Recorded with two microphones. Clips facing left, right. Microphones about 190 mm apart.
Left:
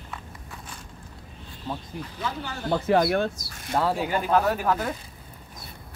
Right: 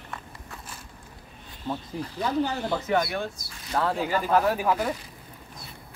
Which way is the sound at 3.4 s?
55° right (ahead or behind).